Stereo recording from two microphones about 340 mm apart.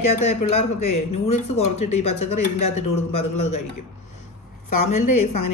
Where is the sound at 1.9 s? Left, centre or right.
Left.